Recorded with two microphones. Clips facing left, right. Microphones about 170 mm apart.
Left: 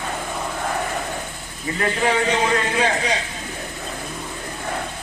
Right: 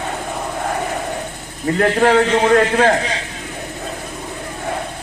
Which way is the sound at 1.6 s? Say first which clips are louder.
Right 7 dB; 60° right (ahead or behind).